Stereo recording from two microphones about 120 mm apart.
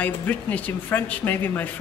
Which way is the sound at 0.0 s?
15° left (ahead or behind).